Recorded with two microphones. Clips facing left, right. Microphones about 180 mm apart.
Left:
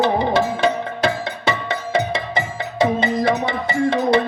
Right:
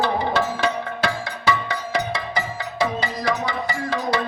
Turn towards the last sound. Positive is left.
turn(degrees=25)  # may be behind; listen again after turning